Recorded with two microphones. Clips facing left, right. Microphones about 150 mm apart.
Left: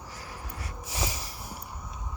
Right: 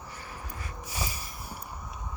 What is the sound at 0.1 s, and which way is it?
Wheeze, 90° left.